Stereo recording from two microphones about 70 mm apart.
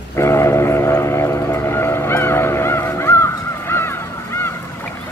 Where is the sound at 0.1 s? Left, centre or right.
Left.